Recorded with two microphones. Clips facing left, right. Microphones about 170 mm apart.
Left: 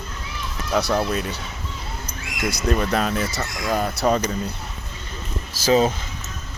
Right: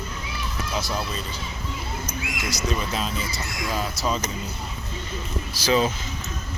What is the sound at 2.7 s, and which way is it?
Speech, 55° left (ahead or behind).